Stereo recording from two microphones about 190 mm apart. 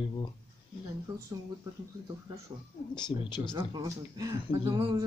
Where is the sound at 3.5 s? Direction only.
20° right (ahead or behind).